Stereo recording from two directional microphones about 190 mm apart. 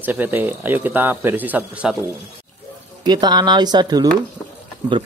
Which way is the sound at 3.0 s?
20° right (ahead or behind).